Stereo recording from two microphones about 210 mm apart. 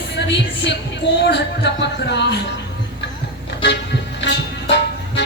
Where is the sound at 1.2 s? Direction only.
55° left (ahead or behind).